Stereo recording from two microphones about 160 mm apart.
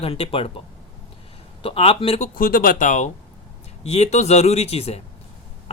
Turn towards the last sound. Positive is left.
turn(degrees=40)  # may be behind; listen again after turning